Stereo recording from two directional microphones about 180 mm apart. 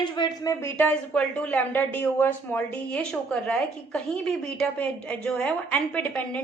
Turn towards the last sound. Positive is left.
turn(degrees=10)  # may be behind; listen again after turning